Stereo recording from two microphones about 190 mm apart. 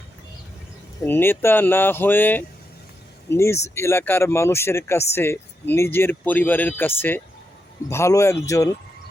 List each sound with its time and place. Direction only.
1.0 s speech: 10° left (ahead or behind)